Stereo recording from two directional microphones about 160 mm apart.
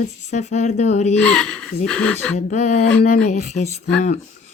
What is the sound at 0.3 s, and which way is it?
Speech, 45° left (ahead or behind).